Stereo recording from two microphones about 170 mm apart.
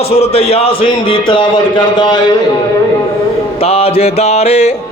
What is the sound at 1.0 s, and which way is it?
Music, 30° left (ahead or behind).